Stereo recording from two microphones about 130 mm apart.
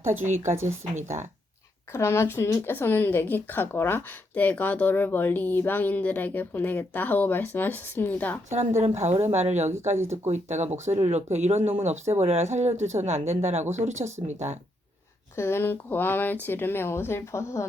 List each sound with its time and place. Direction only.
0.0 s a woman's voice: 15° right (ahead or behind)
0.3 s a woman's voice: 70° right (ahead or behind)
1.9 s speech: 20° left (ahead or behind)
8.5 s speech: 60° right (ahead or behind)
15.4 s speech: 20° left (ahead or behind)